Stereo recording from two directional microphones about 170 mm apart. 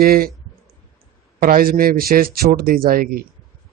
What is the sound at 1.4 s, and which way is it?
Speech, 55° right (ahead or behind).